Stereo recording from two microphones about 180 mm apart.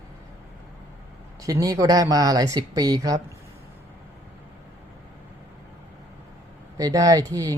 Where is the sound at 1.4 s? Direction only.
20° right (ahead or behind).